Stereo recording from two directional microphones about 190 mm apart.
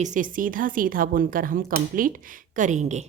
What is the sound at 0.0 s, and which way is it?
A woman's voice, 45° right (ahead or behind).